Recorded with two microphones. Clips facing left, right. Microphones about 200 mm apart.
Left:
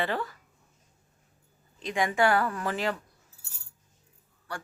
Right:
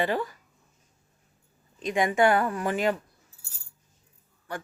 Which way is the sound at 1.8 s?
20° right (ahead or behind).